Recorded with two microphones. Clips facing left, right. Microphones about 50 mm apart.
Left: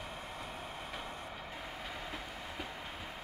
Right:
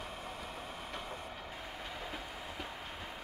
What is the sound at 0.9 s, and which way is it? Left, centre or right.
Train, centre.